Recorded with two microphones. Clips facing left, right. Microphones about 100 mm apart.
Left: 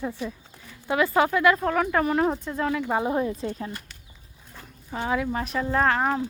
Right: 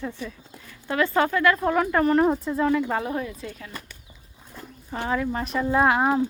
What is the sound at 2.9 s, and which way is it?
Speech, 25° left (ahead or behind).